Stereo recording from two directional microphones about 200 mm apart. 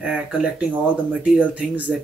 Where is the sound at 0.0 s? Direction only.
5° right (ahead or behind).